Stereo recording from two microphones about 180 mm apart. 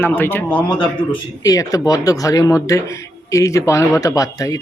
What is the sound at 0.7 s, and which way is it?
Speech, 25° left (ahead or behind).